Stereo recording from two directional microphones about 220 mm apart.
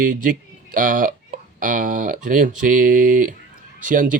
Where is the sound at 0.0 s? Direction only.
35° right (ahead or behind).